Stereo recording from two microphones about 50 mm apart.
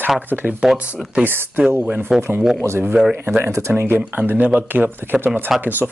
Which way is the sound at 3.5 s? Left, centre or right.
Right.